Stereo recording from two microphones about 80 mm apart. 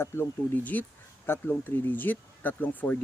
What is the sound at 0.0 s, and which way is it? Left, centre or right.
Speech, left.